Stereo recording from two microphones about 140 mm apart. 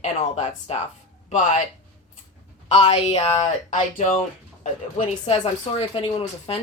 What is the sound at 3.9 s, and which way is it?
Speech, 60° left (ahead or behind).